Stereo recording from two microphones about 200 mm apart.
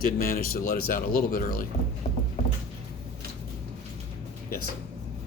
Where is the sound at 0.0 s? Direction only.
45° left (ahead or behind).